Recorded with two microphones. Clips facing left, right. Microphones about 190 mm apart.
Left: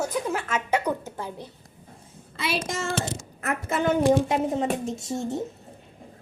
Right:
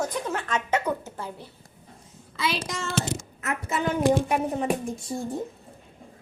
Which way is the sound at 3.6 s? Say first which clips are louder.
Left 2 dB; 55° left (ahead or behind).